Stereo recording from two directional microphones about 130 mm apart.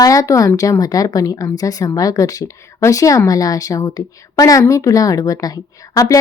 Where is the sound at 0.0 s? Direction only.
25° left (ahead or behind).